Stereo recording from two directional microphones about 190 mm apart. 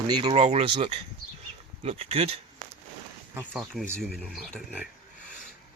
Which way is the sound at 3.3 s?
10° right (ahead or behind).